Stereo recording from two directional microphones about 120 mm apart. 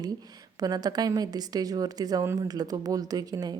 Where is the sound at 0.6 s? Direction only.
35° right (ahead or behind).